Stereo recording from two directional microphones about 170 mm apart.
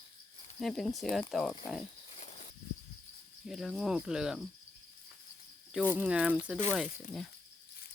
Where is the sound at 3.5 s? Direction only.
Centre (ahead or behind).